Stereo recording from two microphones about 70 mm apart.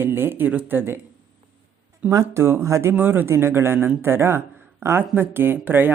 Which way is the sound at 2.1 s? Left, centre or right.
Right.